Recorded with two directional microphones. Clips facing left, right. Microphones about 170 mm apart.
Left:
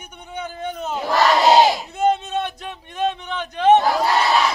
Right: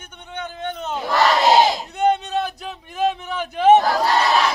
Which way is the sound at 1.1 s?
20° left (ahead or behind).